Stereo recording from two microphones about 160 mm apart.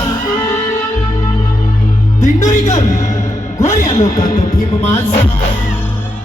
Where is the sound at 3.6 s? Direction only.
20° left (ahead or behind).